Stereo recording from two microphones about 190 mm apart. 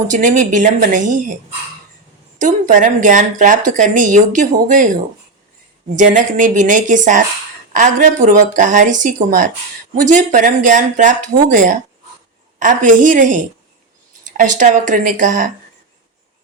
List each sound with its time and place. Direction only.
0.1 s speech: 40° right (ahead or behind)
2.4 s speech: 40° right (ahead or behind)
6.0 s speech: 45° right (ahead or behind)